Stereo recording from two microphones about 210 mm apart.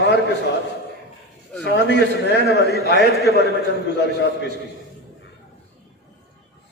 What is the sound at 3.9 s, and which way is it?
Speech, 55° left (ahead or behind).